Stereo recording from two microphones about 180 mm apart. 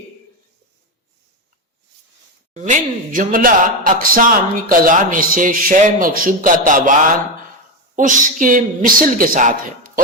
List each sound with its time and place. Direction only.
2.5 s speech: 40° right (ahead or behind)
7.9 s speech: 45° right (ahead or behind)